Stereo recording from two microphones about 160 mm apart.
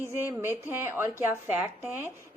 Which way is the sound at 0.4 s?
15° right (ahead or behind).